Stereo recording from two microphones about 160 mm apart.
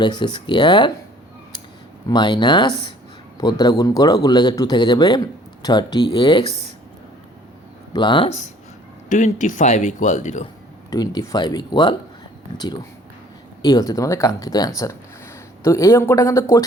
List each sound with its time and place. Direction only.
0.0 s a man's voice: 30° left (ahead or behind)
2.0 s a man's voice: 25° left (ahead or behind)
6.4 s speech: 45° right (ahead or behind)
7.9 s a man's voice: 30° left (ahead or behind)
9.0 s speech: 50° left (ahead or behind)
10.9 s a man's voice: 25° left (ahead or behind)
13.6 s a man's voice: 25° left (ahead or behind)